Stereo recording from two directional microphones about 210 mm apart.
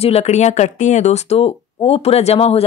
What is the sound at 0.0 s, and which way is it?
A woman's voice, 30° left (ahead or behind).